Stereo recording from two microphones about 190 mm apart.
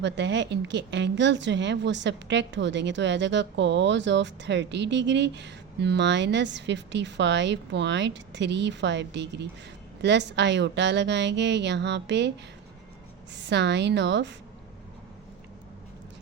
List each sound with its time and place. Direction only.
0.0 s a woman's voice: 65° right (ahead or behind)
13.5 s a woman's voice: 65° right (ahead or behind)